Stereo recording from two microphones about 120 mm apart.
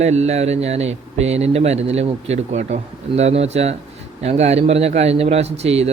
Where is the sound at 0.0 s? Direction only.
65° right (ahead or behind).